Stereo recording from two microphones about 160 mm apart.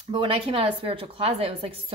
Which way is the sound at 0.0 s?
35° right (ahead or behind).